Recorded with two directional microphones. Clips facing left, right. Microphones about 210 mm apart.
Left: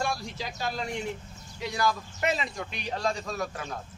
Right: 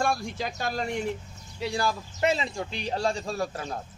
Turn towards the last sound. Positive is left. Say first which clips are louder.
# right 3 dB
turn(degrees=-30)  # may be behind; listen again after turning